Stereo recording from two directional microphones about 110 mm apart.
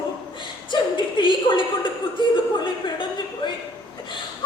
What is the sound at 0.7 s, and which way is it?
Speech, 45° left (ahead or behind).